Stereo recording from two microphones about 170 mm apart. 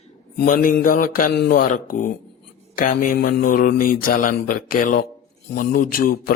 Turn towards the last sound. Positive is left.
turn(degrees=60)  # may be behind; listen again after turning